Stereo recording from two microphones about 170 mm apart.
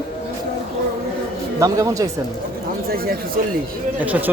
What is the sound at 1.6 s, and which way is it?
Speech, 20° right (ahead or behind).